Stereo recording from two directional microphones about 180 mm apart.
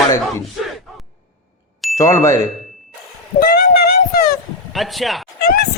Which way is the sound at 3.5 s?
65° left (ahead or behind).